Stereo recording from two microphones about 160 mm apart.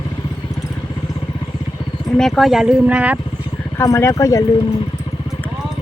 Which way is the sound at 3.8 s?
20° left (ahead or behind).